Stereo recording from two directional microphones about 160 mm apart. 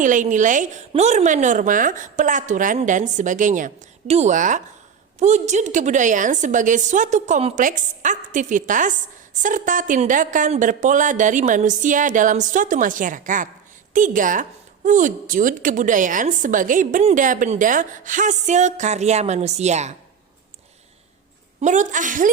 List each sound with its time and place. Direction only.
0.0 s a woman's voice: 50° right (ahead or behind)
21.6 s a woman's voice: 50° right (ahead or behind)